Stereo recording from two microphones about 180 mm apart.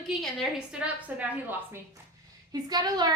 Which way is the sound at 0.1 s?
Centre (ahead or behind).